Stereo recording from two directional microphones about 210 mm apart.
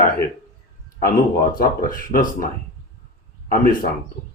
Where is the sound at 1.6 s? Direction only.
40° left (ahead or behind).